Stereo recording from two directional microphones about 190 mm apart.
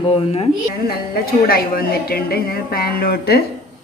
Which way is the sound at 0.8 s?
55° left (ahead or behind).